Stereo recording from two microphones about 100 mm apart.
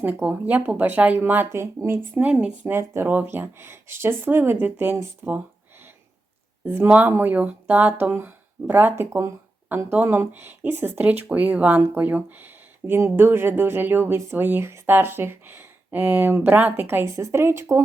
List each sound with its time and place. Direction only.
0.0 s speech: 15° right (ahead or behind)
2.2 s speech: 10° right (ahead or behind)
2.7 s speech: 20° right (ahead or behind)
6.8 s speech: 15° right (ahead or behind)